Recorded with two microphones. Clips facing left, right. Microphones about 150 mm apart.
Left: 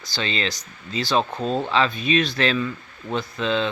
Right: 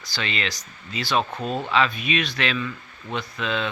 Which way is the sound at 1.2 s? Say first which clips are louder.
Left 2 dB; centre (ahead or behind).